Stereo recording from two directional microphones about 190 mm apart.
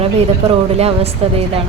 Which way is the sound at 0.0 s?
30° right (ahead or behind).